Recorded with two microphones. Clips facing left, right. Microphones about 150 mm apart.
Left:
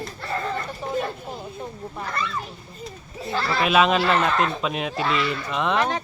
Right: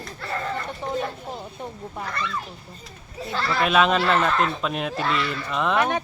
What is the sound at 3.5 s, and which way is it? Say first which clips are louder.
Speech: left 1 dB; 5° left (ahead or behind).